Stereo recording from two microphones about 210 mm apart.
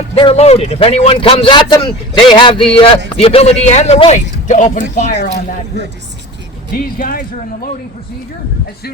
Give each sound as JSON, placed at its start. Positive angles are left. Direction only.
{"t": 0.2, "sound": "speech", "side_deg": 25}
{"t": 7.0, "sound": "speech", "side_deg": 45}